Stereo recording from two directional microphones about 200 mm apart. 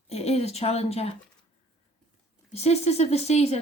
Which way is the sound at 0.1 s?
30° left (ahead or behind).